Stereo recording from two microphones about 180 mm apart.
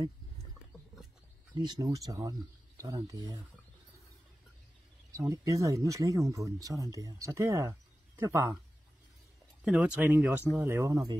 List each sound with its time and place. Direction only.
1.5 s speech: 25° right (ahead or behind)
5.1 s speech: 15° right (ahead or behind)
9.7 s speech: 10° right (ahead or behind)